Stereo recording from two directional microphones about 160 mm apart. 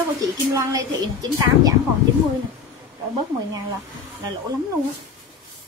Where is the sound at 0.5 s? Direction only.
20° right (ahead or behind).